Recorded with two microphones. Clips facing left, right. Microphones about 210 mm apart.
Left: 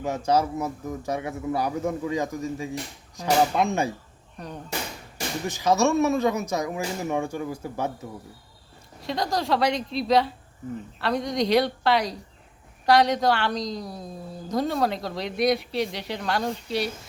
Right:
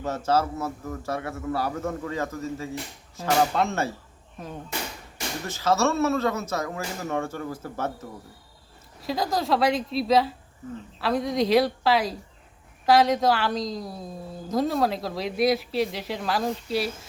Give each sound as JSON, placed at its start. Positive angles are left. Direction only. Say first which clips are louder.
{"t": 0.0, "sound": "a man's voice", "louder": "left 1 dB", "side_deg": 15}
{"t": 4.4, "sound": "speech", "louder": "even", "side_deg": 0}
{"t": 5.5, "sound": "a man's voice", "louder": "left 2 dB", "side_deg": 15}
{"t": 9.0, "sound": "a woman's voice", "louder": "right 1 dB", "side_deg": 0}